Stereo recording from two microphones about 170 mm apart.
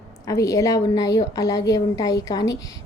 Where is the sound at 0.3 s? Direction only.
20° left (ahead or behind).